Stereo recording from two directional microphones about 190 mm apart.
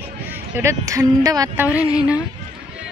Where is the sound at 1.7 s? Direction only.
5° right (ahead or behind).